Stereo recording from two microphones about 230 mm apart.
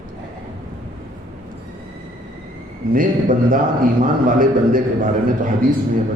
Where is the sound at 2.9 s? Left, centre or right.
Right.